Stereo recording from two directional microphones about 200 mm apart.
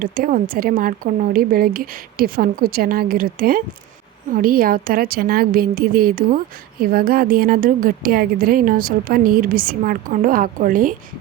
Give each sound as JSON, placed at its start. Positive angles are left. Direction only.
{"t": 0.0, "sound": "a woman's voice", "side_deg": -45}